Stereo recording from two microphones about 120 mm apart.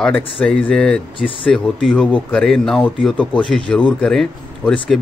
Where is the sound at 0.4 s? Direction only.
15° left (ahead or behind).